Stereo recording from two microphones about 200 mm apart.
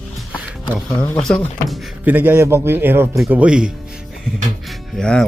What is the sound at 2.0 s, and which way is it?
A man's voice, 10° right (ahead or behind).